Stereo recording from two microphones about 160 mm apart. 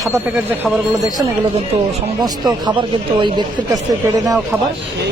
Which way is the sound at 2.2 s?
25° right (ahead or behind).